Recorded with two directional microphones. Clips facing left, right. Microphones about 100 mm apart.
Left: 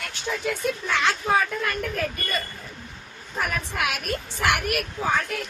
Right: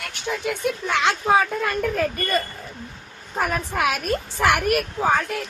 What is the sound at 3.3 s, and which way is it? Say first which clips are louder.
Speech: right 4 dB; 35° right (ahead or behind).